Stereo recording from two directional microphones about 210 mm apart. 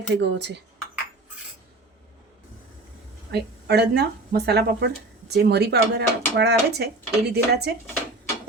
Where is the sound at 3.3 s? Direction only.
50° right (ahead or behind).